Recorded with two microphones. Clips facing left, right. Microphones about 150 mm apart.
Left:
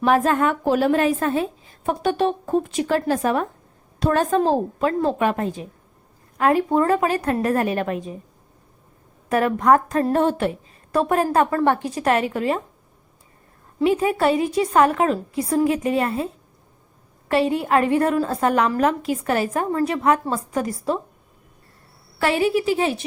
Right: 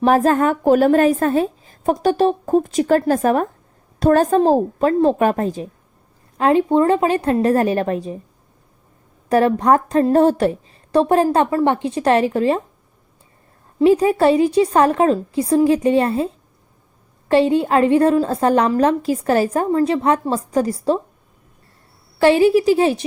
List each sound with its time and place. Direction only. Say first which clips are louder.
0.0 s a woman's voice: right 4 dB; 40° right (ahead or behind)
6.3 s a woman's voice: right 3 dB; 25° right (ahead or behind)
9.3 s a woman's voice: right 3 dB; 30° right (ahead or behind)
13.8 s a woman's voice: right 5 dB; 35° right (ahead or behind)
22.2 s a woman's voice: right 7 dB; 30° right (ahead or behind)